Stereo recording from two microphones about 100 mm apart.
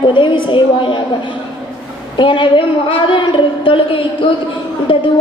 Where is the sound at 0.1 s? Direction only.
55° left (ahead or behind).